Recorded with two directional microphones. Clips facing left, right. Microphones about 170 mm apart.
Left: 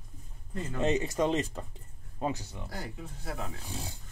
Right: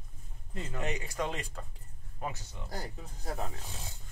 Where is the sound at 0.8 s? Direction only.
25° left (ahead or behind).